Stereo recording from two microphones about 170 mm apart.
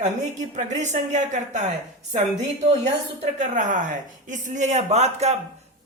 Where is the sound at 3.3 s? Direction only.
45° right (ahead or behind).